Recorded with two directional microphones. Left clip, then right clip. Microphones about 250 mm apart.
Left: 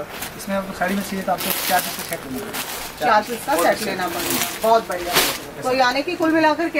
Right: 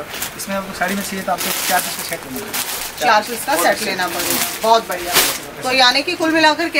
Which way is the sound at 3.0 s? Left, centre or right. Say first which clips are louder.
Right 3 dB; centre.